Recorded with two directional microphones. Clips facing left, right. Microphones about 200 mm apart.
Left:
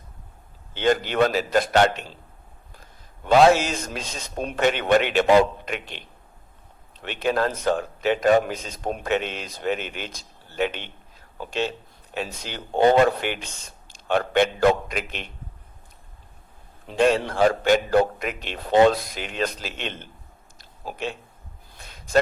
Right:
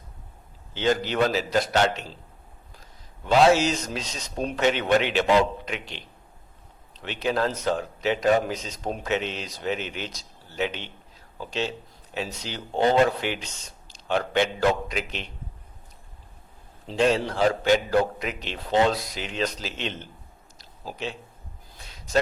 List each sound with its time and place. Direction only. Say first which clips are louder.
0.7 s a man's voice: left 2 dB; 55° left (ahead or behind)
16.8 s a man's voice: left 2 dB; 55° left (ahead or behind)
20.6 s a sound: left 3 dB; 55° left (ahead or behind)